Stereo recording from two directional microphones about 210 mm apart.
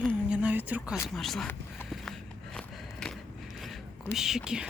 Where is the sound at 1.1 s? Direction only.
Centre (ahead or behind).